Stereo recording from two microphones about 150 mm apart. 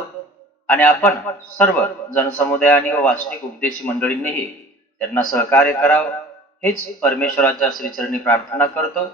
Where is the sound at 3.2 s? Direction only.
70° left (ahead or behind).